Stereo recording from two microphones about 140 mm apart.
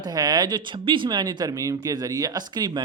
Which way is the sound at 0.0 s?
30° right (ahead or behind).